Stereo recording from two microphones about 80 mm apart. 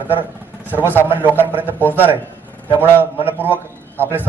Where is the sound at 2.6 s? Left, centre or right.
Right.